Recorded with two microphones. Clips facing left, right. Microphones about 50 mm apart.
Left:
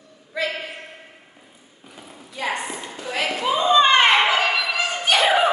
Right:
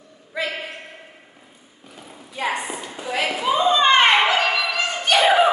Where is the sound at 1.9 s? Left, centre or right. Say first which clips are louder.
Right 1 dB; centre.